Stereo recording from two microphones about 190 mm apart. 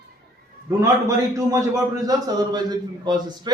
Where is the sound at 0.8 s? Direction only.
15° right (ahead or behind).